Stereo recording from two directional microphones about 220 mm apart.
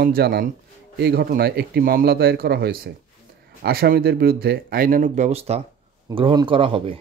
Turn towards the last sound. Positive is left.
turn(degrees=-25)  # may be behind; listen again after turning